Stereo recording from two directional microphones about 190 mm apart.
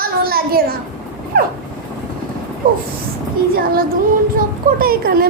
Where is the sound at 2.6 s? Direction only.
50° right (ahead or behind).